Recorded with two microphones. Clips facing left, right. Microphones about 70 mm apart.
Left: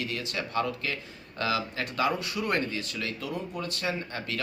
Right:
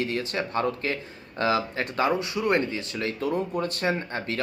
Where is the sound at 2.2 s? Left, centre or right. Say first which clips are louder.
Right 5 dB; right.